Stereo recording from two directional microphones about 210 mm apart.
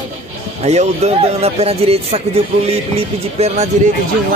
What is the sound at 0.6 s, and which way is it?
Speech, 30° right (ahead or behind).